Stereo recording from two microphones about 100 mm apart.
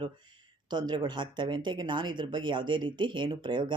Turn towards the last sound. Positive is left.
turn(degrees=-50)  # may be behind; listen again after turning